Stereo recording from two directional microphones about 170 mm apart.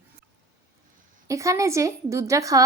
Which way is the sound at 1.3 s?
20° right (ahead or behind).